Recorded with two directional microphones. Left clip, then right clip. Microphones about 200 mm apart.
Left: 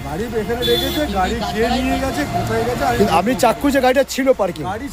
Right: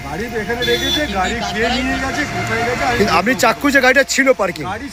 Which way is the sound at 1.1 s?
15° left (ahead or behind).